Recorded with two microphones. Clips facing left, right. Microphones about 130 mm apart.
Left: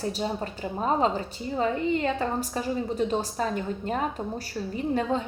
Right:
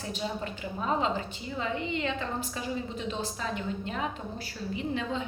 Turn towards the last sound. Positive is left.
turn(degrees=45)  # may be behind; listen again after turning